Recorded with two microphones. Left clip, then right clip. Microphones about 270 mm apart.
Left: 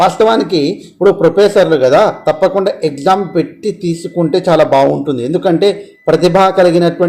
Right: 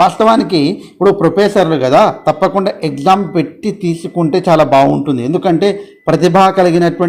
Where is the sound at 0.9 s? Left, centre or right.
Right.